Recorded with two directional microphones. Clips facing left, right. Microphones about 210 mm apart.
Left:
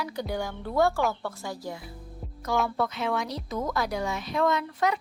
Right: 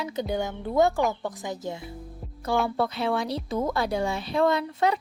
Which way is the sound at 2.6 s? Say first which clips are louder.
Right 2 dB; 30° right (ahead or behind).